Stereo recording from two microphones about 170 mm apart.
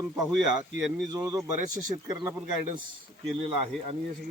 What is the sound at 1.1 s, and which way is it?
Speech, 20° right (ahead or behind).